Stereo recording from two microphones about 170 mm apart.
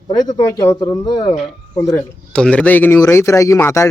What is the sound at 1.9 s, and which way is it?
A man's voice, 5° left (ahead or behind).